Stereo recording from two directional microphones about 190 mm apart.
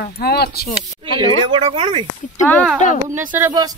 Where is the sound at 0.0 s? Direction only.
55° left (ahead or behind).